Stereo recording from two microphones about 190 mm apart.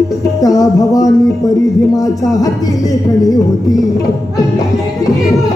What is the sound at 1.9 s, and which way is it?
Speech, 20° left (ahead or behind).